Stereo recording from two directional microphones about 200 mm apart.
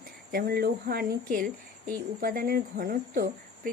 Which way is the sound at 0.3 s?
50° right (ahead or behind).